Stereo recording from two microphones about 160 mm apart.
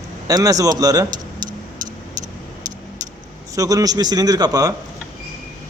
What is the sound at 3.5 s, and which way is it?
A man's voice, 20° right (ahead or behind).